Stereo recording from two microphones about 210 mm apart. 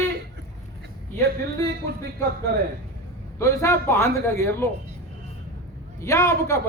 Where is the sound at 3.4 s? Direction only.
15° left (ahead or behind).